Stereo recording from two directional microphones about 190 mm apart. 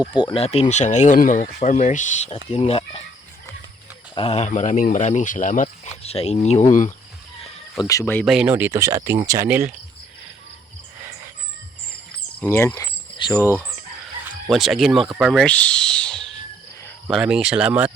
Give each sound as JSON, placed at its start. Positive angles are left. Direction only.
{"t": 0.0, "sound": "speech", "side_deg": 25}
{"t": 4.1, "sound": "speech", "side_deg": 30}
{"t": 5.6, "sound": "speech", "side_deg": 35}
{"t": 7.8, "sound": "speech", "side_deg": 15}
{"t": 8.2, "sound": "speech", "side_deg": -5}
{"t": 12.4, "sound": "speech", "side_deg": 10}
{"t": 14.5, "sound": "speech", "side_deg": 0}